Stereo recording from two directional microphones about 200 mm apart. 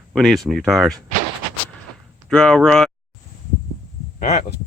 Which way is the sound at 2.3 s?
5° left (ahead or behind).